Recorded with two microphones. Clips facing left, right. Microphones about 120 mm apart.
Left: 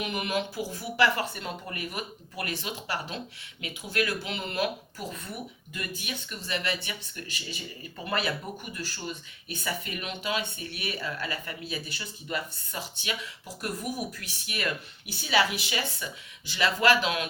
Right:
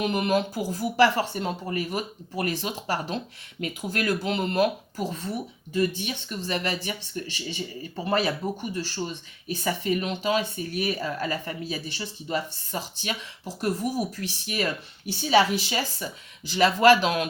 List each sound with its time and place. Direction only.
0.0 s speech: 40° right (ahead or behind)